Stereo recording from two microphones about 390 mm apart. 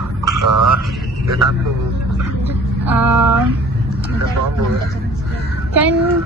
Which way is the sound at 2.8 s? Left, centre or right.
Centre.